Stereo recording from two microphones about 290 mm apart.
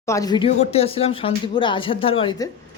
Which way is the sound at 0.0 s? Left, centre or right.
Centre.